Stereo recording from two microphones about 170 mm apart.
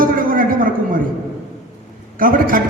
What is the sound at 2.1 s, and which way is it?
Speech, 55° right (ahead or behind).